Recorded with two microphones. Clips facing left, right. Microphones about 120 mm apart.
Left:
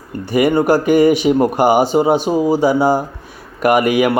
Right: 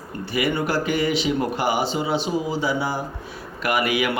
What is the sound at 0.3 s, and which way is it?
Speech, 45° left (ahead or behind).